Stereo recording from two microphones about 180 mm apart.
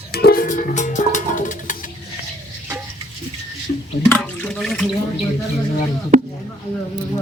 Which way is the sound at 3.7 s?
45° left (ahead or behind).